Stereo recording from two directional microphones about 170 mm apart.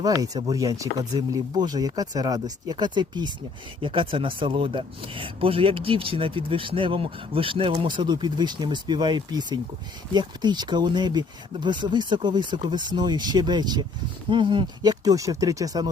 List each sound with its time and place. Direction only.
0.0 s speech: 20° right (ahead or behind)